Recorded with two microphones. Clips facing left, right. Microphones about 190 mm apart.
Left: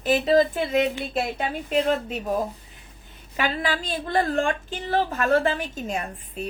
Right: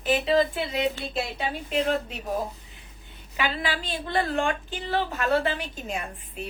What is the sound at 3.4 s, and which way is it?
A woman's voice, 40° left (ahead or behind).